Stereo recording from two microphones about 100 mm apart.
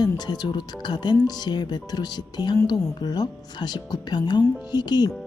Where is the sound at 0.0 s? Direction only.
45° left (ahead or behind).